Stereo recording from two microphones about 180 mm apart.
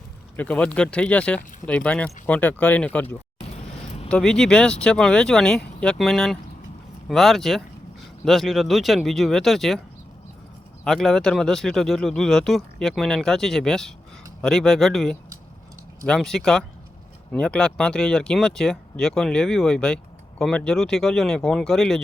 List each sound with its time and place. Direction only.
0.3 s speech: 10° left (ahead or behind)
3.5 s a sound: 35° left (ahead or behind)
4.1 s speech: 5° left (ahead or behind)
10.8 s speech: centre (ahead or behind)